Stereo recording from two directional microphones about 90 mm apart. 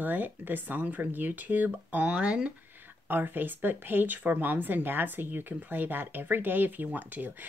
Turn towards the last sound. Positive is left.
turn(degrees=-20)  # may be behind; listen again after turning